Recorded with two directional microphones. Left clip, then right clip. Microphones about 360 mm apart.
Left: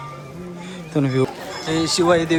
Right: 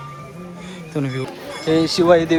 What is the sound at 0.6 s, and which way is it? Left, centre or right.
Music, centre.